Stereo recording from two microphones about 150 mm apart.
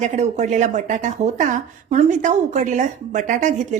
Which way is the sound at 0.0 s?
50° right (ahead or behind).